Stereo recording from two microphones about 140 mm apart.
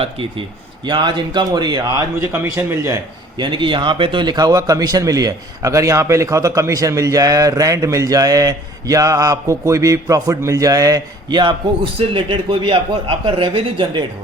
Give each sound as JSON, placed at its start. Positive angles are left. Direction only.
{"t": 0.0, "sound": "a man's voice", "side_deg": -40}